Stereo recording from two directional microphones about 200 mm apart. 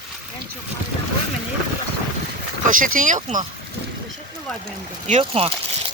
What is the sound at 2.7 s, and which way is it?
Speech, 40° right (ahead or behind).